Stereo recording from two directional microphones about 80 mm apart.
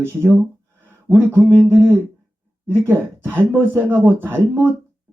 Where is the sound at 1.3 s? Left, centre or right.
Centre.